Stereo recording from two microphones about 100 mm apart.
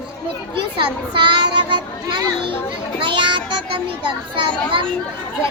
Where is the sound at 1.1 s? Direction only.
50° right (ahead or behind).